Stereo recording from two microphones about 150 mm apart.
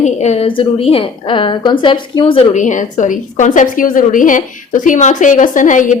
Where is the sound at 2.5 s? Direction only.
55° left (ahead or behind).